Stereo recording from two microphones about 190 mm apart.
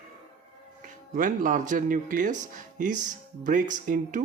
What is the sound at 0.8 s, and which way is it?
Speech, 45° right (ahead or behind).